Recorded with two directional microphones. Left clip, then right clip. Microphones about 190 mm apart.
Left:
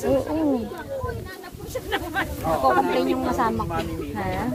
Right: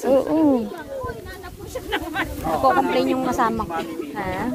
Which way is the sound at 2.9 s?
65° right (ahead or behind).